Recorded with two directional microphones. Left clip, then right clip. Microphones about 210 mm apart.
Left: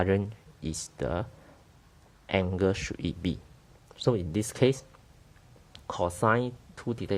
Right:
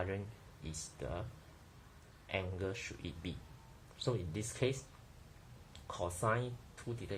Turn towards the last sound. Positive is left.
turn(degrees=50)  # may be behind; listen again after turning